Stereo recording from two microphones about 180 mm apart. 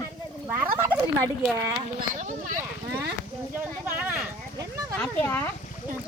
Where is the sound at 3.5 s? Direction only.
5° right (ahead or behind).